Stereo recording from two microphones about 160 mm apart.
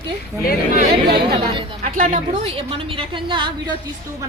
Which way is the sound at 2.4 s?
35° right (ahead or behind).